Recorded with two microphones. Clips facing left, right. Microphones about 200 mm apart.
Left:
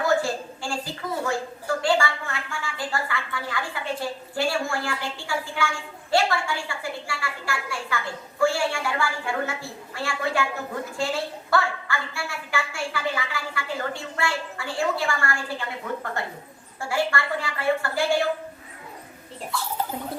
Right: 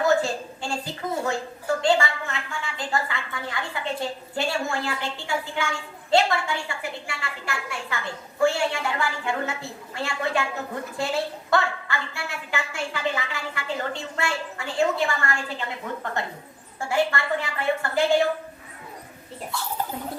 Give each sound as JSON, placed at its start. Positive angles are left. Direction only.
{"t": 0.0, "sound": "a sound", "side_deg": -20}
{"t": 6.1, "sound": "a woman's voice", "side_deg": -20}
{"t": 16.9, "sound": "a woman's voice", "side_deg": -20}